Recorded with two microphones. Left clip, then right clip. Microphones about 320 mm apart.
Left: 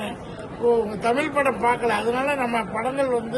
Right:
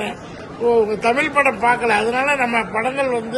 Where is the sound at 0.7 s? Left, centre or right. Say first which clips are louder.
Right 5 dB; centre.